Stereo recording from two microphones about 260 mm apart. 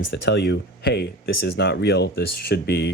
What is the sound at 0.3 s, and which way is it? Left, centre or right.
Speech, left.